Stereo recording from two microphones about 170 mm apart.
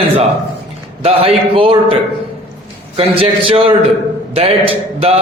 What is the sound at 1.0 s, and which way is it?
Speech, 35° right (ahead or behind).